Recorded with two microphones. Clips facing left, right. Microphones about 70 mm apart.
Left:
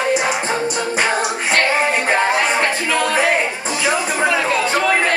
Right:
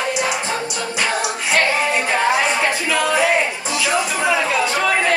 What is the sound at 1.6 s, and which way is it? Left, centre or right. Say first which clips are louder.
Music: left 2 dB; left.